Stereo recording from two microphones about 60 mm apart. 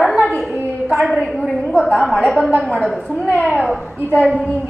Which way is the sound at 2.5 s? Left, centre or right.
Left.